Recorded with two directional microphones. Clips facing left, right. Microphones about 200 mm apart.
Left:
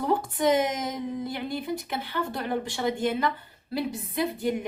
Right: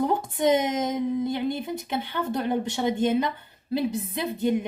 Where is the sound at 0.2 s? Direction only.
25° right (ahead or behind).